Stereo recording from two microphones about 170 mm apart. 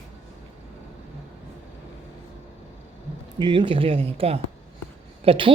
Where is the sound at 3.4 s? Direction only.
30° right (ahead or behind).